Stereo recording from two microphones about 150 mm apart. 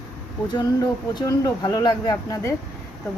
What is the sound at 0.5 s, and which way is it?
Speech, 25° left (ahead or behind).